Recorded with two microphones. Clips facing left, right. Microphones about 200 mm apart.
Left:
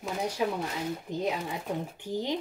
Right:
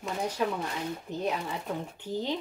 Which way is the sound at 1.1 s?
10° left (ahead or behind).